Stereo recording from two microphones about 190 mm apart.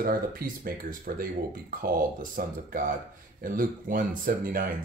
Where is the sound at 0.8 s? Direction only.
50° right (ahead or behind).